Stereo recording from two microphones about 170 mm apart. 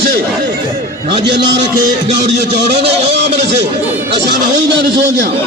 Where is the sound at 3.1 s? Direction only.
90° right.